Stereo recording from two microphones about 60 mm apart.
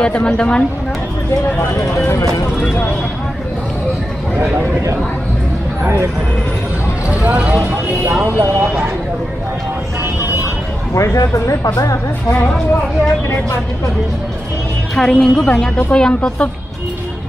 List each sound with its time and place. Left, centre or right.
0.0 s a woman's voice: centre
7.1 s speech: right
8.1 s speech: right
11.0 s speech: left
15.0 s a woman's voice: centre